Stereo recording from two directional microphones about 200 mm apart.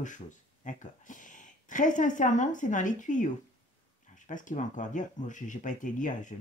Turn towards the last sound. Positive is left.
turn(degrees=40)  # may be behind; listen again after turning